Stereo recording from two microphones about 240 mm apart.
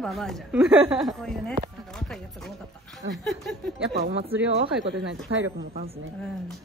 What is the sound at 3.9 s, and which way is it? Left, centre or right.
Speech, right.